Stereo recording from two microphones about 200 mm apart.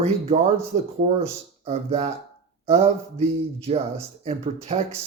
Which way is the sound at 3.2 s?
30° right (ahead or behind).